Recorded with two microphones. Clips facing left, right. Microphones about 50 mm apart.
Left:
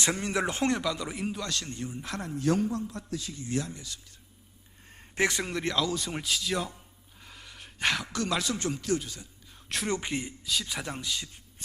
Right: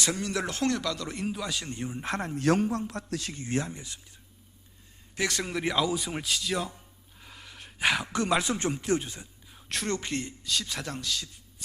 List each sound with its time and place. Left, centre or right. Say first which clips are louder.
0.0 s speech: left 1 dB; left
1.1 s a man's voice: right 1 dB; centre
1.8 s speech: right 4 dB; right
2.3 s a man's voice: right 1 dB; right
3.4 s speech: right 1 dB; right
5.5 s speech: right 1 dB; centre
5.7 s speech: right 2 dB; centre
7.2 s gasp: right 1 dB; centre
8.1 s speech: right 3 dB; right
9.6 s speech: even; centre
9.9 s speech: even; centre
10.9 s speech: right 1 dB; left